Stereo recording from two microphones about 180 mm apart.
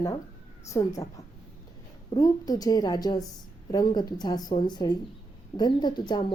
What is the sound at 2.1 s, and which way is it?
Speech, 20° left (ahead or behind).